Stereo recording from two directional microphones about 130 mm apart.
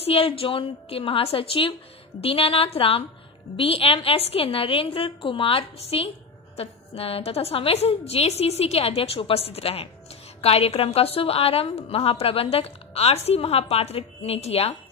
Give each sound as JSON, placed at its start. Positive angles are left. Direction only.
{"t": 0.0, "sound": "a woman's voice", "side_deg": 45}